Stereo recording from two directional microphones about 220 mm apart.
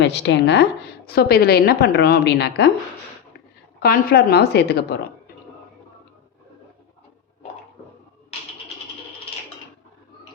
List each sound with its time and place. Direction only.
0.0 s a woman's voice: 50° left (ahead or behind)
3.8 s a woman's voice: 45° left (ahead or behind)